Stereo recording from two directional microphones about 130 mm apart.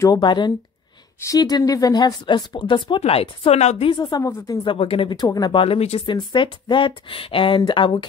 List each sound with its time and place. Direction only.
0.0 s speech: 35° left (ahead or behind)
3.0 s a woman's voice: 50° left (ahead or behind)
3.9 s speech: 30° left (ahead or behind)
4.6 s speech: 45° left (ahead or behind)
5.6 s a woman's voice: 50° left (ahead or behind)
6.0 s speech: 40° left (ahead or behind)